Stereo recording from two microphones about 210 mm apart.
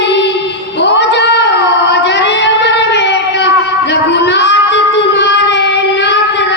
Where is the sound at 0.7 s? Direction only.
55° left (ahead or behind).